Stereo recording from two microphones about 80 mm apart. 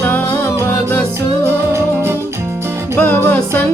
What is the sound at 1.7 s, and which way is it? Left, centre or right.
Music, right.